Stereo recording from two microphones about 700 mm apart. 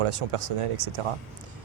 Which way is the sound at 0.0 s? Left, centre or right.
Right.